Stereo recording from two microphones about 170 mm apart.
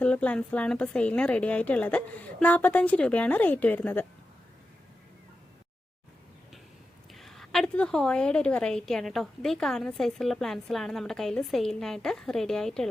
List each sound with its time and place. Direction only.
0.0 s a woman's voice: 5° left (ahead or behind)
7.1 s a woman's voice: centre (ahead or behind)